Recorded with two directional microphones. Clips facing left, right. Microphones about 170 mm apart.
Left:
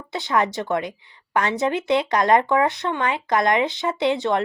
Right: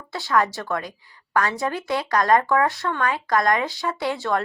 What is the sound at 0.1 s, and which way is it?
A woman's voice, 20° left (ahead or behind).